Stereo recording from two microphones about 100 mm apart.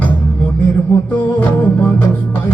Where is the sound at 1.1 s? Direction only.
20° left (ahead or behind).